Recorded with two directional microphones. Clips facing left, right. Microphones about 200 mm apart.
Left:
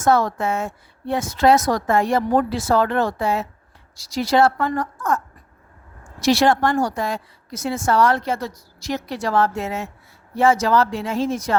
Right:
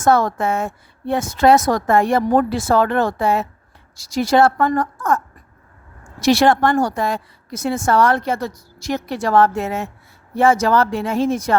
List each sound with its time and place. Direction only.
0.0 s a woman's voice: 50° right (ahead or behind)